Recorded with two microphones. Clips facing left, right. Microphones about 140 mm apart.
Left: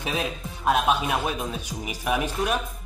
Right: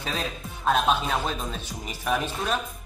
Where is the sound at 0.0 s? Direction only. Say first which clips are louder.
Left 3 dB; 15° left (ahead or behind).